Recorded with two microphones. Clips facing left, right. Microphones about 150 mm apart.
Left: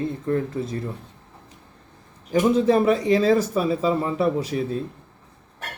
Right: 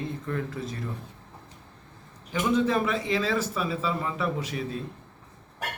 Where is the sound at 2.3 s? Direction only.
35° left (ahead or behind).